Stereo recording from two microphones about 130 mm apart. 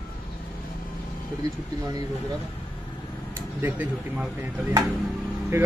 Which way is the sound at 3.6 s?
15° right (ahead or behind).